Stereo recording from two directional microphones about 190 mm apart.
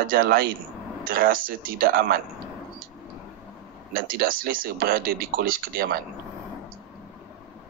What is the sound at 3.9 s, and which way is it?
Speech, 50° right (ahead or behind).